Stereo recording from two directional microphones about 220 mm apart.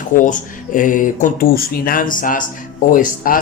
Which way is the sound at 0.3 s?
35° left (ahead or behind).